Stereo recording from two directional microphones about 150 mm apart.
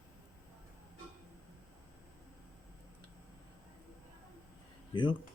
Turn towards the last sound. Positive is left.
turn(degrees=30)  # may be behind; listen again after turning